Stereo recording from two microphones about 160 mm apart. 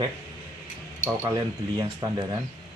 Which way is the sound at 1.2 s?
20° right (ahead or behind).